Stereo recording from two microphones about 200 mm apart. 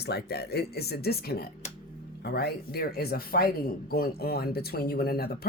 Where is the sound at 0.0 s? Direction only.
55° left (ahead or behind).